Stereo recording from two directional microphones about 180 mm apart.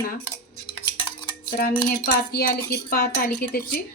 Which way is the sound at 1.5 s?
55° left (ahead or behind).